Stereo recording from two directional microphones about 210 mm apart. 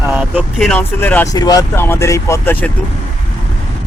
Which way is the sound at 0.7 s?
10° left (ahead or behind).